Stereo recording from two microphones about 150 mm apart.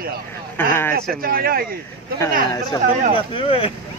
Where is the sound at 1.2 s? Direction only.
80° right.